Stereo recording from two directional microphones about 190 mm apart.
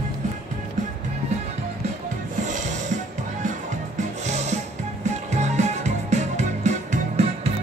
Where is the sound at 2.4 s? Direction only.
40° right (ahead or behind).